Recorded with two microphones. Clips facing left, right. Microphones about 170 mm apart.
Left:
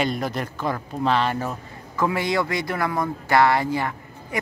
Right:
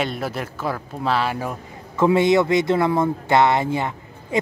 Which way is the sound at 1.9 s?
25° right (ahead or behind).